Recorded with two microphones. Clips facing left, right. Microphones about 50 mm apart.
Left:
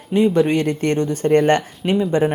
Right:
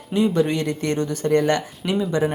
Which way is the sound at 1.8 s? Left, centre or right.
Centre.